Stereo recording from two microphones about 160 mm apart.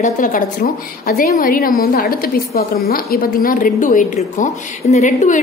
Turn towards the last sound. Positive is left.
turn(degrees=50)  # may be behind; listen again after turning